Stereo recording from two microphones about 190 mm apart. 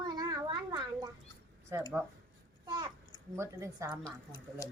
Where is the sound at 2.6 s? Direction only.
20° right (ahead or behind).